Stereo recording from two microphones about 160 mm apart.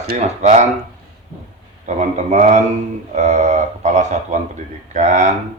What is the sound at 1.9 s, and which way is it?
A man's voice, 45° right (ahead or behind).